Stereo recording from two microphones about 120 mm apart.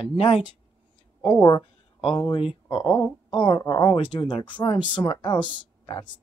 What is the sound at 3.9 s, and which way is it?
Speech, 45° left (ahead or behind).